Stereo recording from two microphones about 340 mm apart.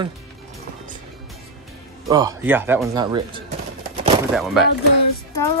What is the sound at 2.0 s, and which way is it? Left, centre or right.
Speech, centre.